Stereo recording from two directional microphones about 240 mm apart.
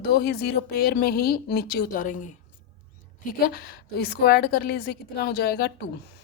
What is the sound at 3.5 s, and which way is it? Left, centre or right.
Speech, left.